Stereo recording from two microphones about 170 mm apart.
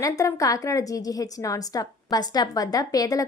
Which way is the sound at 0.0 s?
20° left (ahead or behind).